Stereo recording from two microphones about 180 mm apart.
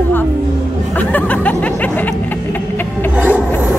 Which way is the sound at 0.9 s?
10° left (ahead or behind).